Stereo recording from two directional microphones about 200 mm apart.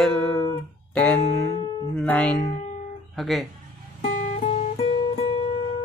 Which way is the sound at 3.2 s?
Centre (ahead or behind).